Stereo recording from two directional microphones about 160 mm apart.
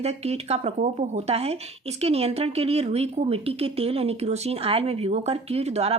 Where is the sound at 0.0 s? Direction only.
40° right (ahead or behind).